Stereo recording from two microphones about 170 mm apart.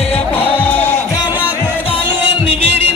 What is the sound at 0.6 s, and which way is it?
Music, 10° left (ahead or behind).